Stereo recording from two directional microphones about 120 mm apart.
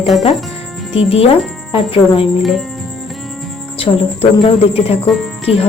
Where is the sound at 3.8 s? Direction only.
50° left (ahead or behind).